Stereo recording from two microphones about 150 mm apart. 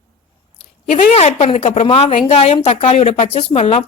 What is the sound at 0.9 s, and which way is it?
A woman's voice, 50° left (ahead or behind).